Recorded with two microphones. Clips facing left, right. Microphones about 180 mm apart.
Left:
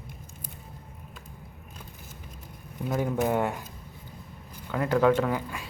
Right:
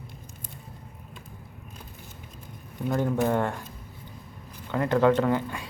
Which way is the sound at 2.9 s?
5° left (ahead or behind).